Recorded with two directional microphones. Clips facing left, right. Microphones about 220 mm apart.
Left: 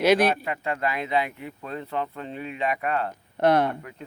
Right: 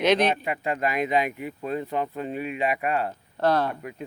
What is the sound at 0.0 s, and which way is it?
Speech, 10° left (ahead or behind).